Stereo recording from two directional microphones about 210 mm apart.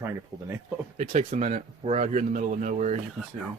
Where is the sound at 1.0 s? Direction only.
35° right (ahead or behind).